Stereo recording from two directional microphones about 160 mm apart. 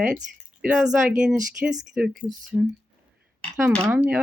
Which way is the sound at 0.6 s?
10° right (ahead or behind).